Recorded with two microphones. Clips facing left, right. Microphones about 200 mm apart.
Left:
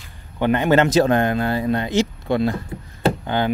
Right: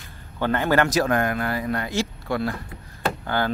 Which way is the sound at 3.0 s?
20° left (ahead or behind).